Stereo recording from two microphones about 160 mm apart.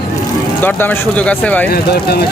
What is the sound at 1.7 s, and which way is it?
Speech, 80° left.